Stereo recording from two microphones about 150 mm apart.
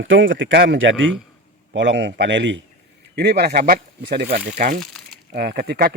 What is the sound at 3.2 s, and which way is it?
Speech, 90° right.